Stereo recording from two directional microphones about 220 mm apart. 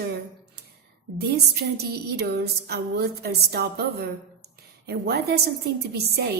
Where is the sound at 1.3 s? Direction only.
45° right (ahead or behind).